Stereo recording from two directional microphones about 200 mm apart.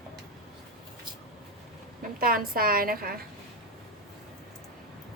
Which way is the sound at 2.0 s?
45° right (ahead or behind).